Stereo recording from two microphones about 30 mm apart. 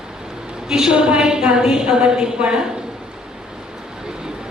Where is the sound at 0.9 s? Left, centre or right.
Right.